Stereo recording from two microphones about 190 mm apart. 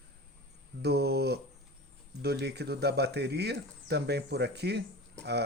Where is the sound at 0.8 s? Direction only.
60° right (ahead or behind).